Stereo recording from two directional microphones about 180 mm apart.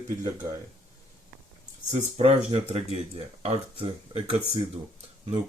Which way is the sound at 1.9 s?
35° right (ahead or behind).